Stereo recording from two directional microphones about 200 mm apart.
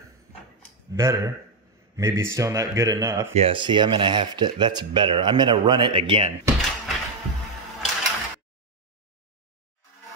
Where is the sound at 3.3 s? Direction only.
25° right (ahead or behind).